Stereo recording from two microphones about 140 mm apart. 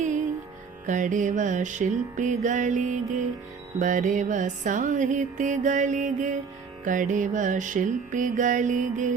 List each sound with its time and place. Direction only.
0.0 s music: 60° right (ahead or behind)